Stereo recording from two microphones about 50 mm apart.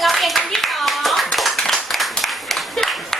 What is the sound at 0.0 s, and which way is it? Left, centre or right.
Clapping, centre.